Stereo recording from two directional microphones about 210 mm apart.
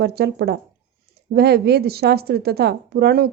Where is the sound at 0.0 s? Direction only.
50° right (ahead or behind).